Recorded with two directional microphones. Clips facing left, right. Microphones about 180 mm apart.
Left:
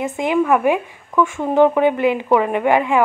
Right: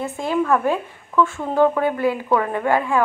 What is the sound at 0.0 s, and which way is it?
Speech, 15° left (ahead or behind).